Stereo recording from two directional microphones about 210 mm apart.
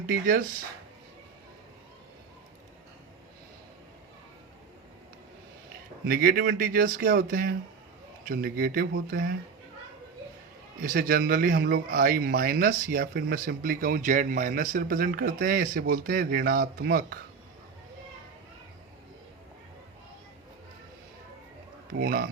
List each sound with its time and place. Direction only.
0.0 s speech: 45° right (ahead or behind)
6.1 s speech: 45° right (ahead or behind)
10.8 s speech: 40° right (ahead or behind)
21.9 s speech: 45° right (ahead or behind)